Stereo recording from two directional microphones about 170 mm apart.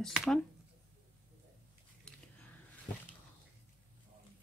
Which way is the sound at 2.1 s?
5° left (ahead or behind).